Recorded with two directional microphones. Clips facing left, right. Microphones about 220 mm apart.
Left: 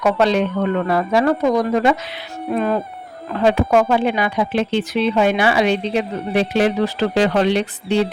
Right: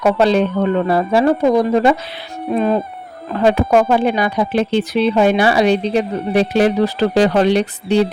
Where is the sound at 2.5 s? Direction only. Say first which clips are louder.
Right 3 dB; 20° right (ahead or behind).